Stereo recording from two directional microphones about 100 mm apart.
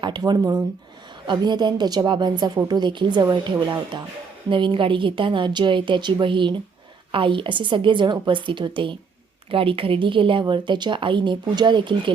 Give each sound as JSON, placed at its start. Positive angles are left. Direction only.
{"t": 0.0, "sound": "a woman's voice", "side_deg": -45}